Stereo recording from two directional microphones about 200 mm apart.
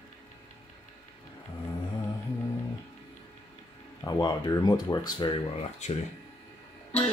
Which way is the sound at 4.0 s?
20° left (ahead or behind).